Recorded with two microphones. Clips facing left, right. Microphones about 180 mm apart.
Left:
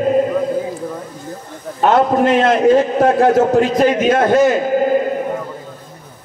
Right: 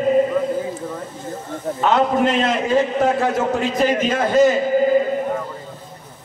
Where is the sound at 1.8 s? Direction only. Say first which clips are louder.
Left 4 dB; 55° left (ahead or behind).